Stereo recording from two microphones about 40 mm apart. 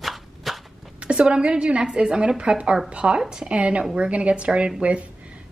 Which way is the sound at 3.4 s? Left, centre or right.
Right.